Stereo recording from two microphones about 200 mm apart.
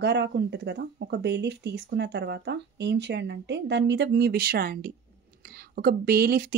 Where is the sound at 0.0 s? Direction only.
55° right (ahead or behind).